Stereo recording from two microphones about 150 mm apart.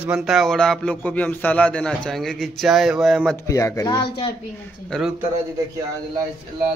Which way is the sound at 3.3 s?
20° left (ahead or behind).